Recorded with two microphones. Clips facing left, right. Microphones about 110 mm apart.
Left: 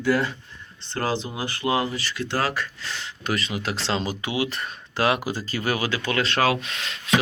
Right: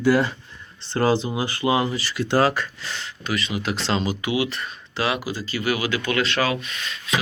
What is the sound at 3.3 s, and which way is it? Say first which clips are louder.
Speech: right 4 dB; 35° left (ahead or behind).